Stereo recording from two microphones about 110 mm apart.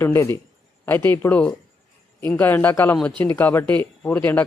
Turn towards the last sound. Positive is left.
turn(degrees=15)  # may be behind; listen again after turning